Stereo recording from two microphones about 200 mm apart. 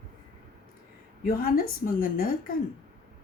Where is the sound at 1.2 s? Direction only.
45° left (ahead or behind).